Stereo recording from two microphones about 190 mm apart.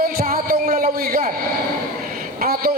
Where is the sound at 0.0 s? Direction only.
50° right (ahead or behind).